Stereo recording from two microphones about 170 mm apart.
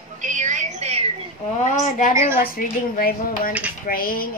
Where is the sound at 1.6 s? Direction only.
50° left (ahead or behind).